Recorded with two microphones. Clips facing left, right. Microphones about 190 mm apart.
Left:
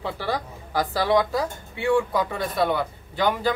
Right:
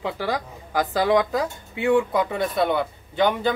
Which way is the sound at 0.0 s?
15° right (ahead or behind).